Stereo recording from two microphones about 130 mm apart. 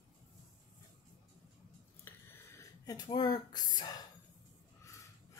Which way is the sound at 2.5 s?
30° left (ahead or behind).